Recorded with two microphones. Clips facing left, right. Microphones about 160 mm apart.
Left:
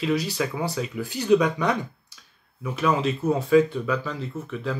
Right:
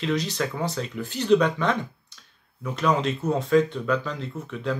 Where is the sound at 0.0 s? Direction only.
10° left (ahead or behind).